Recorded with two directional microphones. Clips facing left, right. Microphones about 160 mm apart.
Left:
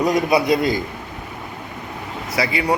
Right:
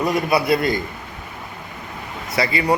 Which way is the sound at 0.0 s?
20° left (ahead or behind).